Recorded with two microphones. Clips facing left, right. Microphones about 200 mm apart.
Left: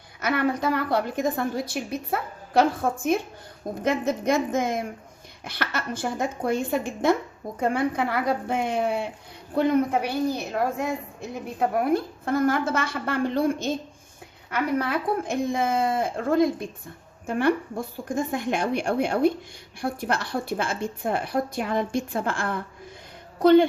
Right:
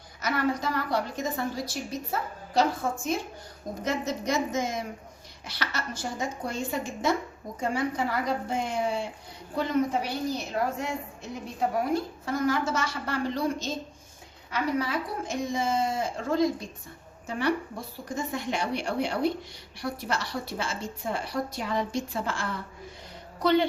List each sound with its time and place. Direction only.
0.2 s a woman's voice: 60° left (ahead or behind)